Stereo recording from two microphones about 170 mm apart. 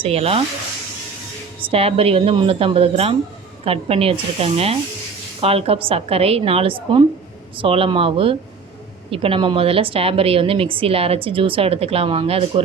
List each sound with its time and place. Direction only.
0.0 s a woman's voice: 35° right (ahead or behind)
1.7 s a woman's voice: 35° right (ahead or behind)